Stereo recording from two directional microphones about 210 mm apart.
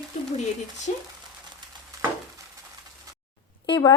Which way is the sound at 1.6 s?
20° right (ahead or behind).